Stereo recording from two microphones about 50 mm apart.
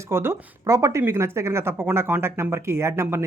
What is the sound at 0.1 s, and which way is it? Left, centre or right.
Speech, right.